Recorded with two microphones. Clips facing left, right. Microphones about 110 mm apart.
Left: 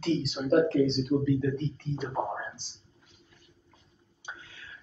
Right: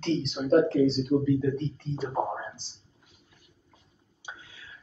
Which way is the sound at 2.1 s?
25° right (ahead or behind).